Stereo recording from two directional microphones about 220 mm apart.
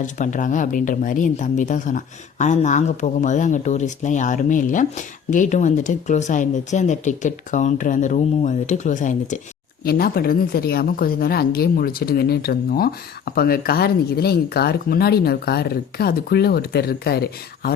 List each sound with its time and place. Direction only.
0.0 s speech: 35° left (ahead or behind)